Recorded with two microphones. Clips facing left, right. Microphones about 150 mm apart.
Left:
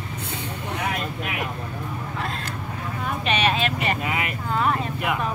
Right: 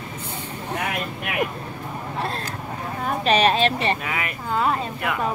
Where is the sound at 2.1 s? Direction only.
35° right (ahead or behind).